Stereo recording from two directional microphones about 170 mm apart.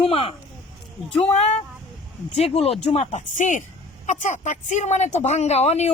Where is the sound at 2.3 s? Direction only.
40° left (ahead or behind).